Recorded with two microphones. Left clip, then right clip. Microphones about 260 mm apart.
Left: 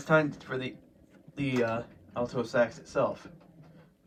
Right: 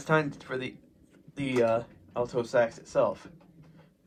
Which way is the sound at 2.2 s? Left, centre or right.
Right.